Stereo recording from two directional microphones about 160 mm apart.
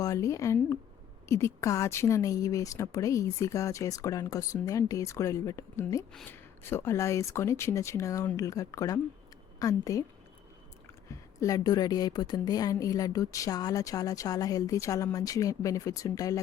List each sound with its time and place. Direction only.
0.0 s a woman's voice: 20° left (ahead or behind)
11.3 s a woman's voice: 20° left (ahead or behind)